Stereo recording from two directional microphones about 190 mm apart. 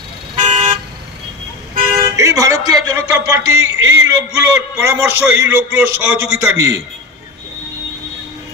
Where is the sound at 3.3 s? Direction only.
15° right (ahead or behind).